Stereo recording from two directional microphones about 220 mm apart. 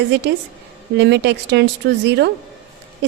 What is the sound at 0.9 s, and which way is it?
A woman's voice, 50° right (ahead or behind).